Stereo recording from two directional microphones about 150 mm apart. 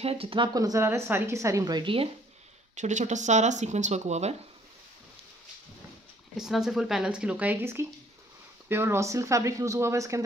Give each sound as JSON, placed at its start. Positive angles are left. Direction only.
{"t": 0.0, "sound": "speech", "side_deg": -40}
{"t": 2.7, "sound": "speech", "side_deg": -50}
{"t": 6.3, "sound": "speech", "side_deg": -5}